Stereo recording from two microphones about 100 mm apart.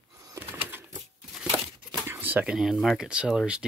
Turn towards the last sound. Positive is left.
turn(degrees=-10)  # may be behind; listen again after turning